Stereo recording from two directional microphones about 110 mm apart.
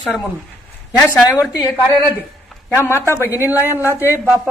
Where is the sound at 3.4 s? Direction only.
20° right (ahead or behind).